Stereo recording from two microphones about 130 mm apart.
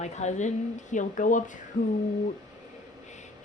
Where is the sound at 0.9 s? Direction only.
80° left.